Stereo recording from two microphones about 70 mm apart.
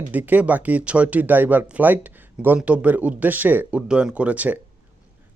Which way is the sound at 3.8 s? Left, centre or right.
Centre.